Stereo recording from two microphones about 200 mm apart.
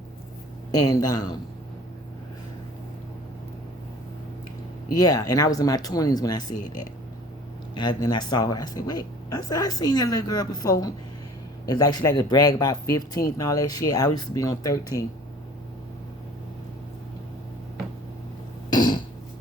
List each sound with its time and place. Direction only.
0.7 s a woman's voice: 20° left (ahead or behind)
4.9 s a woman's voice: 20° left (ahead or behind)
18.7 s throat clearing: 20° left (ahead or behind)